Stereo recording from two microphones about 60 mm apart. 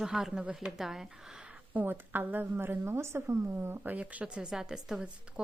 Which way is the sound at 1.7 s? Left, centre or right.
Right.